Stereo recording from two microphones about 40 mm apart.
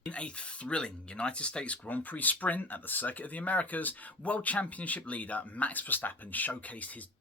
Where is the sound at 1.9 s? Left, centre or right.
Left.